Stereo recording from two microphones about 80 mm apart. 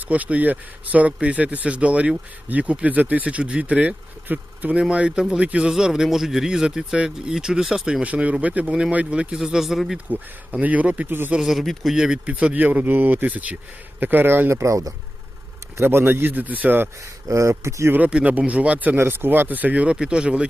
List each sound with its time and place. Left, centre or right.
0.1 s speech: centre
8.0 s speech: centre
10.1 s speech: centre
11.3 s speech: centre; by 14.6 s right
14.6 s speech: right
15.8 s speech: right
17.2 s speech: right
17.9 s speech: centre